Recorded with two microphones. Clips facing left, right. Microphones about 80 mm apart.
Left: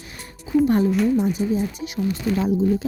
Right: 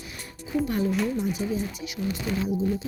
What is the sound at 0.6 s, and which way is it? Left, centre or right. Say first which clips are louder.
Speech: left 9 dB; left.